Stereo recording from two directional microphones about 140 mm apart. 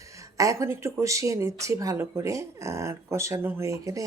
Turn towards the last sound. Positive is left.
turn(degrees=-25)  # may be behind; listen again after turning